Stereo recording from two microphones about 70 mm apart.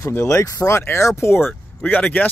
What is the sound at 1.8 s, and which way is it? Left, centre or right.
Speech, left.